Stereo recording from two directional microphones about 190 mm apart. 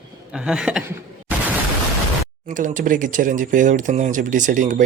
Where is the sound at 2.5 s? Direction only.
45° right (ahead or behind).